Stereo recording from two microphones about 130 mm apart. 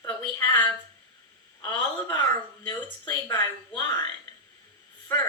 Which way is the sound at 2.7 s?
35° left (ahead or behind).